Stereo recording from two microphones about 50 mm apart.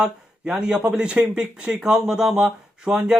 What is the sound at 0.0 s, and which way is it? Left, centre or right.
Speech, centre.